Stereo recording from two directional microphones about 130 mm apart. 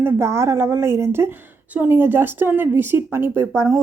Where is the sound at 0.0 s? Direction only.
20° right (ahead or behind).